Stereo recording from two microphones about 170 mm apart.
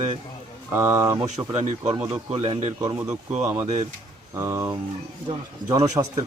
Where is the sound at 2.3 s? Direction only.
35° right (ahead or behind).